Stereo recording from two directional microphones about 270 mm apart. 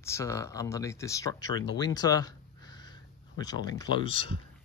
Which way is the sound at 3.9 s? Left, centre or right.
Centre.